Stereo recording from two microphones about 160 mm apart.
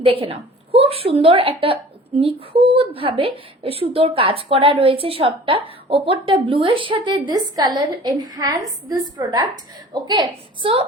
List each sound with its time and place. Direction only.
0.0 s a woman's voice: 35° right (ahead or behind)